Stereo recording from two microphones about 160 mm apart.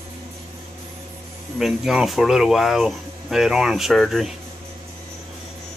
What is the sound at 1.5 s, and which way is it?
Speech, centre (ahead or behind).